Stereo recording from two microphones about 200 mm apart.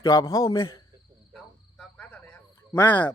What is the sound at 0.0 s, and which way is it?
Speech, 15° left (ahead or behind).